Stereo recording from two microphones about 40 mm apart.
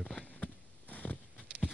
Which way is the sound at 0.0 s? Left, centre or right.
Centre.